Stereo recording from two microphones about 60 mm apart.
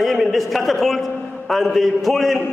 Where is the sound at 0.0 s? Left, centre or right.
Centre.